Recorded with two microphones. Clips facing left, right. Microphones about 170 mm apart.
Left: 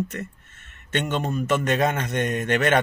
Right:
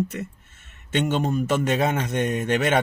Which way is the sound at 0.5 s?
60° left (ahead or behind).